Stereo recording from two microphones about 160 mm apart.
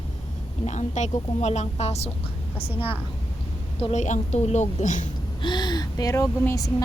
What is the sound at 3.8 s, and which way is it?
A woman's voice, 45° left (ahead or behind).